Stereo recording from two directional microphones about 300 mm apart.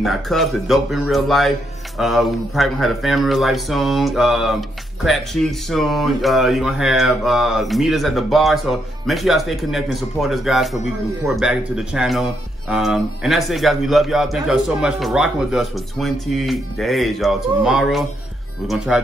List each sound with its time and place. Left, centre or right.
0.0 s speech: centre